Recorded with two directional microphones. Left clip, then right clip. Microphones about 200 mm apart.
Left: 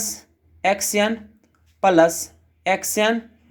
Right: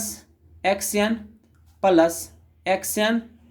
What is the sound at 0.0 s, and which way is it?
Speech, 20° left (ahead or behind).